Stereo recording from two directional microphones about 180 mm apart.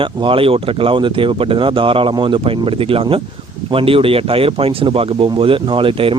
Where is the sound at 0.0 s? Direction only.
30° right (ahead or behind).